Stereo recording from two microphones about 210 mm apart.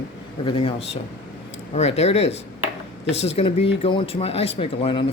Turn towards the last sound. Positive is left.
turn(degrees=25)  # may be behind; listen again after turning